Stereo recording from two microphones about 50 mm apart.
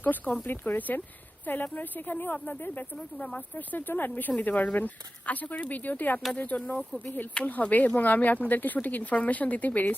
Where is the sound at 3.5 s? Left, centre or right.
Left.